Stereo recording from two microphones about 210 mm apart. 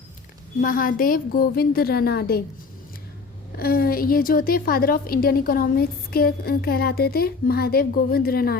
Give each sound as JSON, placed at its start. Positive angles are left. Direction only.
{"t": 0.6, "sound": "a woman's voice", "side_deg": 40}
{"t": 3.6, "sound": "a woman's voice", "side_deg": 45}